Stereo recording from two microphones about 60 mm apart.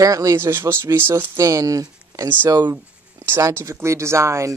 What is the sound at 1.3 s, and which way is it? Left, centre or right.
Speech, right.